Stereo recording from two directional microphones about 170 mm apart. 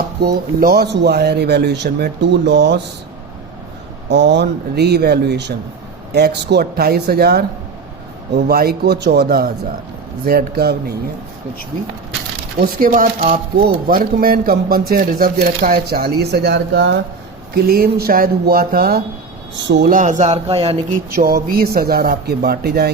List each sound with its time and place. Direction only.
0.2 s speech: 65° right (ahead or behind); by 2.8 s 90° right
4.1 s speech: 90° right; by 10.9 s 65° right (ahead or behind)
12.5 s speech: 55° right (ahead or behind); by 17.0 s 90° right
17.5 s speech: 65° right (ahead or behind)
19.6 s speech: 90° right
19.9 s a man's voice: 50° right (ahead or behind)
21.2 s speech: 60° right (ahead or behind)